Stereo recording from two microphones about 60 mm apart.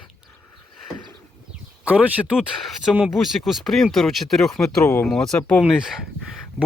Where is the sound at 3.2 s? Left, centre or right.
Centre.